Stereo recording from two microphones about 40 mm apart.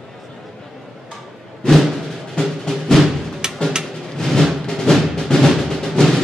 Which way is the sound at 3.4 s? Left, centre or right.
Centre.